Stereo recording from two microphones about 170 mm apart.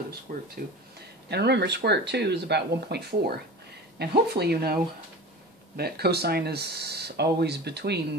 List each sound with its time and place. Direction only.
0.3 s speech: 50° right (ahead or behind)
1.3 s speech: 80° right
5.8 s speech: 70° right (ahead or behind)